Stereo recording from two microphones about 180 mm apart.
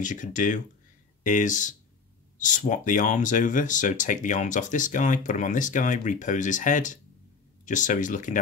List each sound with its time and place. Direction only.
0.0 s speech: 45° left (ahead or behind)